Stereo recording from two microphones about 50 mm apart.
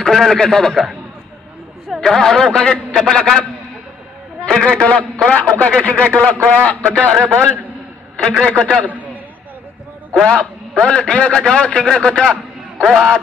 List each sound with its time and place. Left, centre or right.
0.0 s a man's voice: centre
2.0 s a man's voice: centre
5.3 s speech: left
7.1 s a man's voice: centre
10.1 s a man's voice: centre
12.8 s a man's voice: centre